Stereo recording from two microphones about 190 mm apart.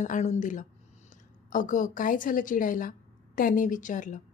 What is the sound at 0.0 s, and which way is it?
Speech, 40° left (ahead or behind).